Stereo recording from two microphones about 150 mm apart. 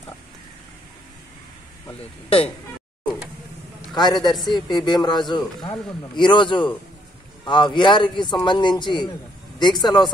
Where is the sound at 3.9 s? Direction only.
30° left (ahead or behind).